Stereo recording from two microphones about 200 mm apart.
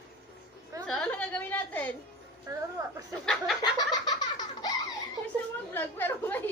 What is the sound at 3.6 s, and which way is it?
Laughter, 20° left (ahead or behind).